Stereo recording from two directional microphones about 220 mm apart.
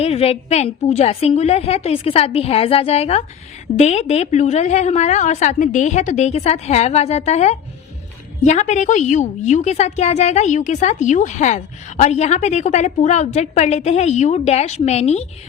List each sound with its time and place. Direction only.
0.0 s a woman's voice: 25° left (ahead or behind)